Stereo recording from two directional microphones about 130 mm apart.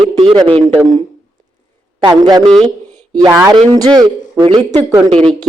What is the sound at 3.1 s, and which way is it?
A man's voice, 25° right (ahead or behind).